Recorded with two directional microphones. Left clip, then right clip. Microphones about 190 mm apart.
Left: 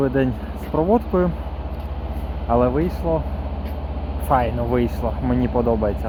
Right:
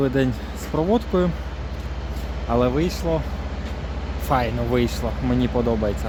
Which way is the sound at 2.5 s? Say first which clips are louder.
Left 2 dB; 15° right (ahead or behind).